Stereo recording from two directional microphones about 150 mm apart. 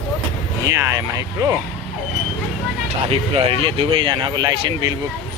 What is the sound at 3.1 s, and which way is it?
Speech, 40° right (ahead or behind).